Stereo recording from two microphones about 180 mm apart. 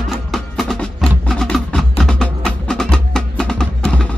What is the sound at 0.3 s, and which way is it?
Music, centre (ahead or behind).